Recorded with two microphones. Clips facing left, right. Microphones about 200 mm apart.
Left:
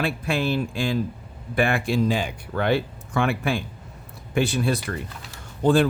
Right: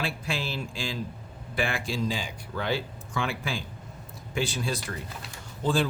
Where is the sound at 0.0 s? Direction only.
55° left (ahead or behind).